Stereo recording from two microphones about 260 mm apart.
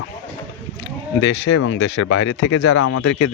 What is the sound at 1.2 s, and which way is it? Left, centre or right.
Speech, left.